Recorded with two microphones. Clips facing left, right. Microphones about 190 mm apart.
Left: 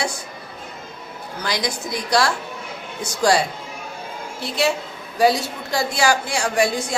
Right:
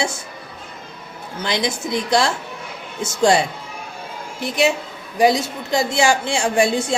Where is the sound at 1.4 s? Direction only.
25° right (ahead or behind).